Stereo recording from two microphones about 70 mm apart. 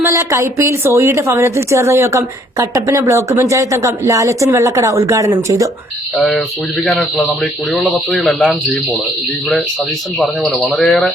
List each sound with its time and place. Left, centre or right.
0.0 s a woman's voice: right
6.8 s speech: centre
8.4 s speech: centre
10.2 s speech: centre